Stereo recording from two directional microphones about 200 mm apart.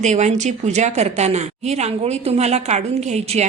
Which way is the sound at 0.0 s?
35° right (ahead or behind).